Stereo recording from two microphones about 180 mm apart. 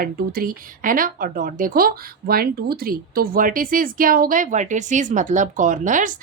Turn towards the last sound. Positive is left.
turn(degrees=-45)  # may be behind; listen again after turning